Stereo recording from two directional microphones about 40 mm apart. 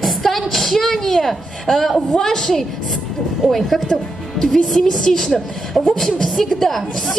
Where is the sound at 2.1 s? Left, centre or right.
Centre.